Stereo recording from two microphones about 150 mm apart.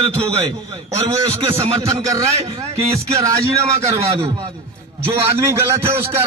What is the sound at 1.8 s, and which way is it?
A man's voice, 20° right (ahead or behind).